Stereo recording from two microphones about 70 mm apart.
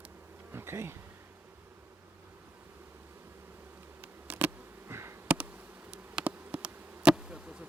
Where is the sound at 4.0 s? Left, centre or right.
Right.